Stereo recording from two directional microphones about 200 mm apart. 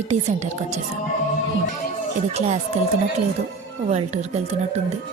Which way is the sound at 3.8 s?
35° right (ahead or behind).